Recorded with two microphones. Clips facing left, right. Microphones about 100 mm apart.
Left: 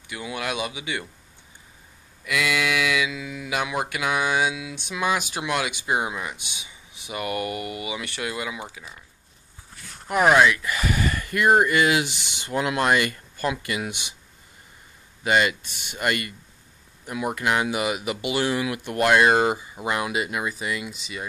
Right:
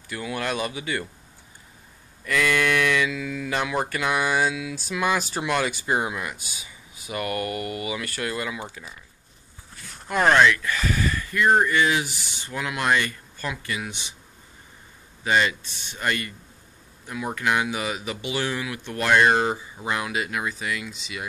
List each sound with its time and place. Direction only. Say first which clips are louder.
0.1 s speech: right 2 dB; 15° left (ahead or behind)
2.2 s speech: right 2 dB; 10° left (ahead or behind)
10.0 s speech: left 1 dB; 10° left (ahead or behind)
12.5 s speech: left 6 dB; 25° left (ahead or behind)
12.8 s speech: left 2 dB; 15° left (ahead or behind)
15.3 s speech: left 1 dB; 10° left (ahead or behind)
18.4 s speech: left 4 dB; 20° left (ahead or behind); by 21.2 s 5° left (ahead or behind)